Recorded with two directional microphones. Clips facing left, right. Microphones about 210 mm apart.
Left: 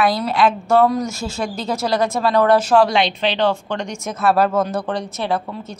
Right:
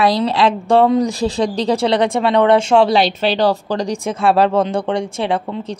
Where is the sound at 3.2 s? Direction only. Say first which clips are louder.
Right 3 dB; 40° right (ahead or behind).